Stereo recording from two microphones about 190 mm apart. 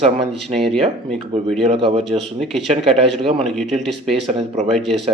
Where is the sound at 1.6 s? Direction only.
30° right (ahead or behind).